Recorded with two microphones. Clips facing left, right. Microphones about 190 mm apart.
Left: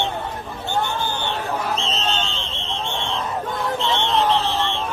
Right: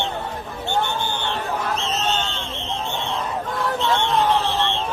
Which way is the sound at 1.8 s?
30° left (ahead or behind).